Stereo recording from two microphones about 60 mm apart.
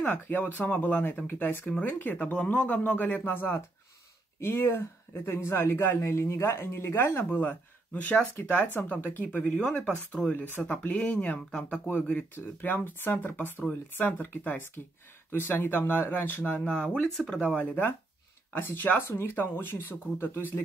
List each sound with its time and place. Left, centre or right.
0.0 s speech: left
9.4 s speech: centre
12.4 s speech: left
17.6 s speech: left